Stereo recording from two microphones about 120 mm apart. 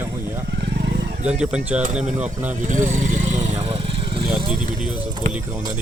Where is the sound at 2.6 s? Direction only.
90° right.